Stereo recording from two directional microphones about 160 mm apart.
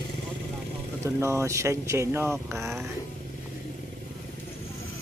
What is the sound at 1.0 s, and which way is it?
Speech, 20° right (ahead or behind).